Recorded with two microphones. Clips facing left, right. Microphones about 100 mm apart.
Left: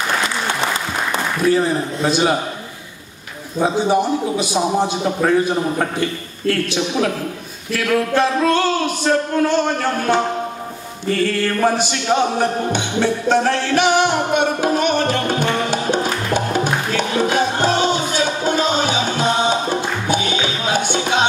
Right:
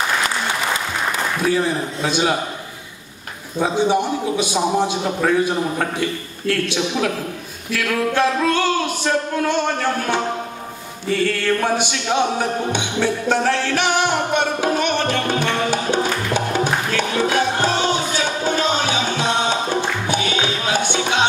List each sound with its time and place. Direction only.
1.6 s a man's voice: centre (ahead or behind)
3.5 s music: 5° left (ahead or behind)
4.5 s a man's voice: 5° left (ahead or behind)
14.0 s music: 10° left (ahead or behind)